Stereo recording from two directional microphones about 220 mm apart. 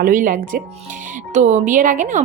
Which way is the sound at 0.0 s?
40° right (ahead or behind).